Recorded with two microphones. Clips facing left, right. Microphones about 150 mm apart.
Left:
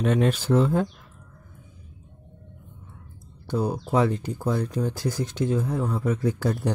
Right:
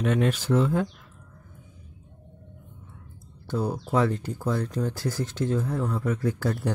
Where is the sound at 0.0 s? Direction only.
30° left (ahead or behind).